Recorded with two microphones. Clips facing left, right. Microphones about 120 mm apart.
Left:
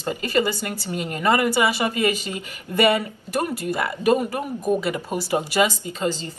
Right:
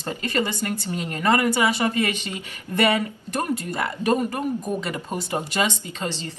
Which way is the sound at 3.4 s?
10° left (ahead or behind).